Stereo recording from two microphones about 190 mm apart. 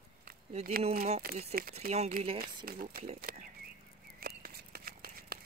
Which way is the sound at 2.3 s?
50° right (ahead or behind).